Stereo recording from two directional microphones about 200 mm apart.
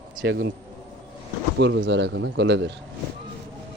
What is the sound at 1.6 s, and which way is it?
A man's voice, 65° right (ahead or behind).